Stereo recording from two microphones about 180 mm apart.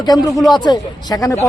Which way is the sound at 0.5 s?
25° left (ahead or behind).